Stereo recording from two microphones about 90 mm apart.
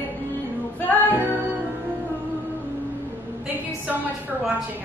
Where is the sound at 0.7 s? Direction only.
20° left (ahead or behind).